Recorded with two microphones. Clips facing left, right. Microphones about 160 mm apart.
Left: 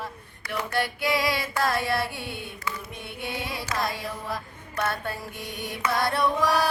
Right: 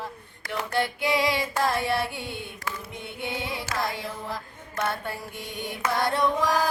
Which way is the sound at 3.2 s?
20° right (ahead or behind).